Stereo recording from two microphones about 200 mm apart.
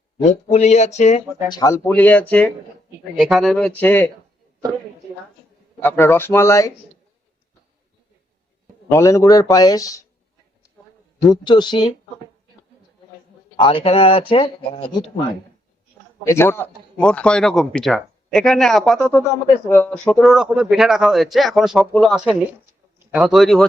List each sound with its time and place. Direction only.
0.2 s speech: 35° left (ahead or behind)
1.5 s speech: 20° left (ahead or behind)
1.9 s a man's voice: 10° left (ahead or behind)
5.8 s speech: 10° left (ahead or behind)
8.9 s speech: 15° left (ahead or behind)
11.3 s speech: 20° left (ahead or behind)
13.6 s speech: 25° left (ahead or behind)
16.2 s a man's voice: 10° left (ahead or behind)